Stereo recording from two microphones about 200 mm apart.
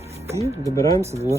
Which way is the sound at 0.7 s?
15° left (ahead or behind).